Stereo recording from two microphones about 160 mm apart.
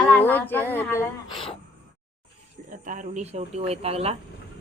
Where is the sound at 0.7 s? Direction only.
10° left (ahead or behind).